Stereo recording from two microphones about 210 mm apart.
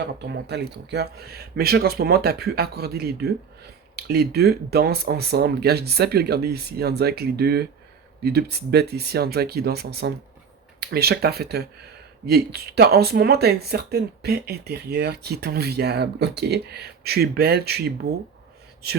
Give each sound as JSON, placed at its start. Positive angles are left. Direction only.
{"t": 0.0, "sound": "speech", "side_deg": -55}